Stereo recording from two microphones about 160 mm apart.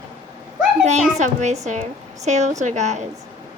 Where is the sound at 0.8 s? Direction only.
45° right (ahead or behind).